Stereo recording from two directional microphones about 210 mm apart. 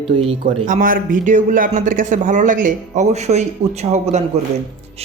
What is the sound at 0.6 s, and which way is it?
A man's voice, 40° right (ahead or behind).